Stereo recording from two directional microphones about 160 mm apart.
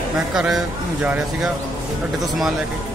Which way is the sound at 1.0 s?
10° right (ahead or behind).